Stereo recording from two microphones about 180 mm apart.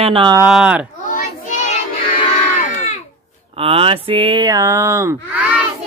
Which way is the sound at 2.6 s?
40° left (ahead or behind).